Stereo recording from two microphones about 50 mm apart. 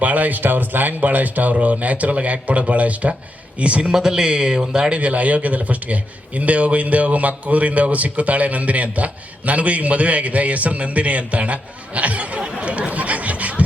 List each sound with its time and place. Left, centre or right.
0.0 s speech: right
3.9 s a man's voice: centre
4.9 s speech: right